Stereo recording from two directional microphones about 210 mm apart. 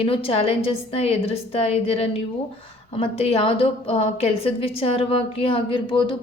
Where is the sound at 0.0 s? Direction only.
25° left (ahead or behind).